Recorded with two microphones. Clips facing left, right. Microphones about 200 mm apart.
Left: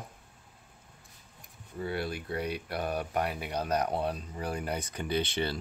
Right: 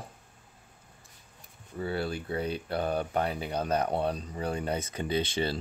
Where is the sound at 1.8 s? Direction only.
30° right (ahead or behind).